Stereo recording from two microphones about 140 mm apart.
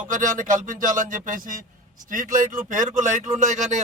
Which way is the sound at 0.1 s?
70° right (ahead or behind).